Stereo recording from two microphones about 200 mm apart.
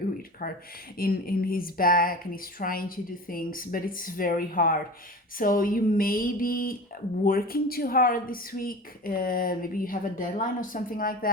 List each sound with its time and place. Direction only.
0.4 s a woman's voice: 50° left (ahead or behind)